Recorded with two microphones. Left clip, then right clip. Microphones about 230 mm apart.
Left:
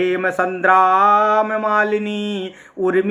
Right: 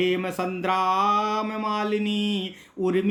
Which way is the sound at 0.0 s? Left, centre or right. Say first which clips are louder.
Left 7 dB; right.